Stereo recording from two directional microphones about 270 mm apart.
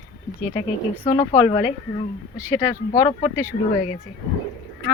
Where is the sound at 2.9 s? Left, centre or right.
Left.